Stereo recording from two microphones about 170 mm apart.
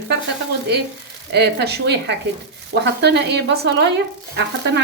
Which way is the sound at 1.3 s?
80° right.